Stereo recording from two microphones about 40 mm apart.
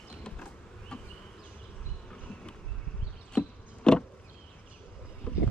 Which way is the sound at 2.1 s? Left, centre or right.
Left.